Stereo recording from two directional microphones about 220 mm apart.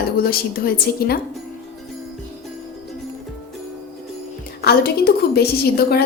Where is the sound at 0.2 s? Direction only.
45° left (ahead or behind).